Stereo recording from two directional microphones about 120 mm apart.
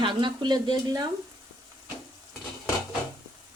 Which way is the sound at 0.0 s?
40° right (ahead or behind).